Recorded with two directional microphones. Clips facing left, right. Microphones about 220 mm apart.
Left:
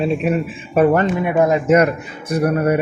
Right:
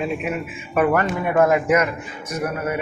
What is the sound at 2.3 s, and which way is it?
Speech, 35° left (ahead or behind).